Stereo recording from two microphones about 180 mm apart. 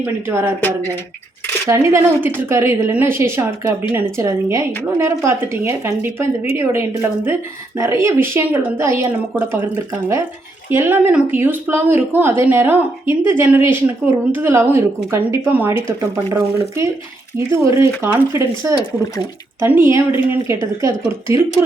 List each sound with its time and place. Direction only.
0.0 s speech: 10° right (ahead or behind)
1.6 s speech: 15° right (ahead or behind)